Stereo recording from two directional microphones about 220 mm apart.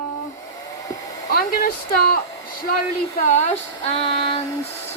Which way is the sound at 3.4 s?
30° left (ahead or behind).